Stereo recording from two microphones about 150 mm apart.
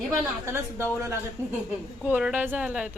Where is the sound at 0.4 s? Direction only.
20° right (ahead or behind).